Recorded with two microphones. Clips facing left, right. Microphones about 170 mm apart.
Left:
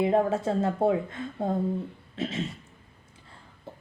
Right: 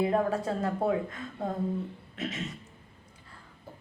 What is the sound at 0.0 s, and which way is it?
Speech, 25° left (ahead or behind).